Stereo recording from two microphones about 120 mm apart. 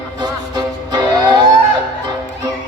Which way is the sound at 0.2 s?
35° right (ahead or behind).